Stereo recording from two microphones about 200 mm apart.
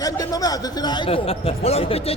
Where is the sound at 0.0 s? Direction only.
20° left (ahead or behind).